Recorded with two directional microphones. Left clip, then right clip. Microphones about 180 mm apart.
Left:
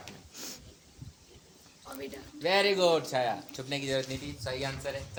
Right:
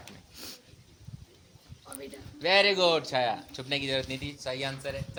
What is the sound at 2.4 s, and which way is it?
Speech, 40° right (ahead or behind).